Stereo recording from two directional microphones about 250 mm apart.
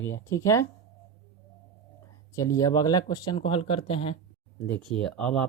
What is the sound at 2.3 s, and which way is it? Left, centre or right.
Speech, centre.